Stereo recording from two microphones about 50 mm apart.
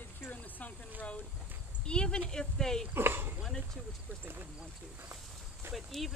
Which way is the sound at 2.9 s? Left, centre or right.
Right.